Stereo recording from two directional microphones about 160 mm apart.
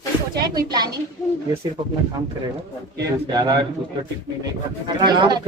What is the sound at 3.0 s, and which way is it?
Speech, 25° right (ahead or behind).